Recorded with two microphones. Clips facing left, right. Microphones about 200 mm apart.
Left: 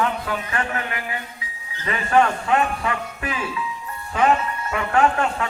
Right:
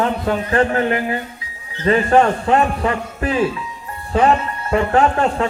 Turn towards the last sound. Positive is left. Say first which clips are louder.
# right 4 dB
turn(degrees=-35)  # may be behind; listen again after turning